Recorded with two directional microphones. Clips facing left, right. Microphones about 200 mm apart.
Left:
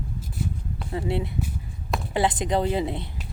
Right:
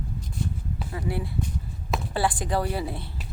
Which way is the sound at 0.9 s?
25° left (ahead or behind).